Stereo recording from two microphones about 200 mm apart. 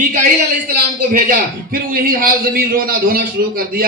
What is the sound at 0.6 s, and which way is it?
A man's voice, 45° right (ahead or behind).